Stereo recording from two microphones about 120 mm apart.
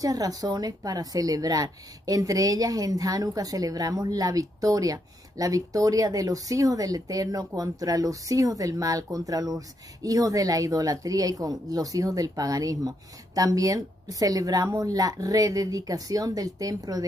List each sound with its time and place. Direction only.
0.0 s a woman's voice: 30° right (ahead or behind)